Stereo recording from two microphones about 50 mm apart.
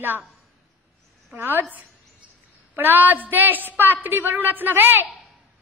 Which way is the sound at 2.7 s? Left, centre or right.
Right.